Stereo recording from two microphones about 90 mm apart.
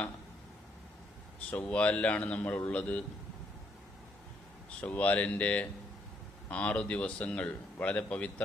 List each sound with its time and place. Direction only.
1.5 s a man's voice: 15° left (ahead or behind)
4.8 s a man's voice: 15° left (ahead or behind)